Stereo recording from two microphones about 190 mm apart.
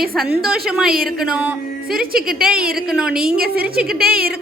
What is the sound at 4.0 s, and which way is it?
Speech, 50° right (ahead or behind).